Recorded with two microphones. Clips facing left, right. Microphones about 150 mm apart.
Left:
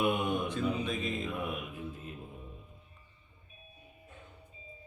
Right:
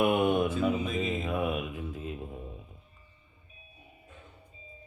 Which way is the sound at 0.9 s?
90° right.